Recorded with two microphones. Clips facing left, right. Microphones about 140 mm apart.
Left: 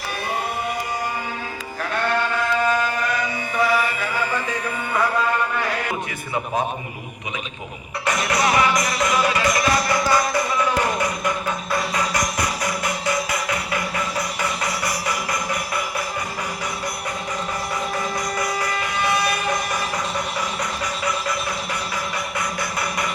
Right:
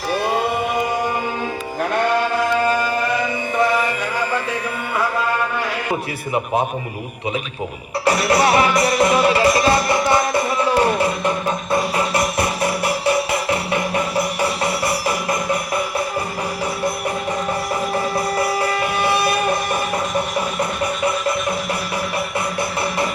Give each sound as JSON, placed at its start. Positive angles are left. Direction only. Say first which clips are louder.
{"t": 8.0, "sound": "music", "louder": "right 5 dB", "side_deg": -35}
{"t": 17.9, "sound": "vehicle", "louder": "right 5 dB", "side_deg": -30}